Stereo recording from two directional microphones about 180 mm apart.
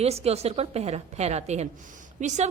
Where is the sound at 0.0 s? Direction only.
35° right (ahead or behind).